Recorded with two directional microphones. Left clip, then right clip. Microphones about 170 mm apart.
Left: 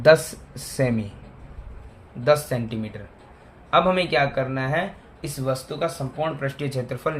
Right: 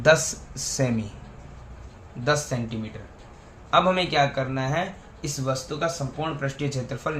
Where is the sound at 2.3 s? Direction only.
40° left (ahead or behind).